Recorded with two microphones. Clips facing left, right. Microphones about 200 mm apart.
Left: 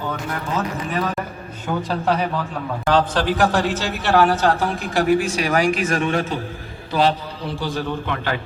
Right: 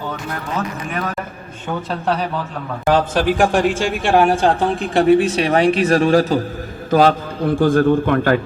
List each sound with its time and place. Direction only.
1.6 s a man's voice: centre (ahead or behind)
2.8 s a man's voice: 10° right (ahead or behind); by 8.4 s 50° right (ahead or behind)